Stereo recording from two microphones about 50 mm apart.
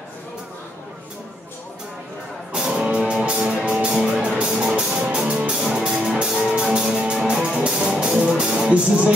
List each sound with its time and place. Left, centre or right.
2.5 s music: centre
3.8 s music: centre
5.5 s music: centre